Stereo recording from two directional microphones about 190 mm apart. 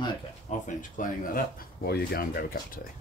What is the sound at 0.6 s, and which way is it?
Speech, 45° left (ahead or behind).